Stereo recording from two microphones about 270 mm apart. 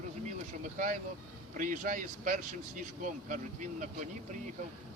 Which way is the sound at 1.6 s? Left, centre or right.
Right.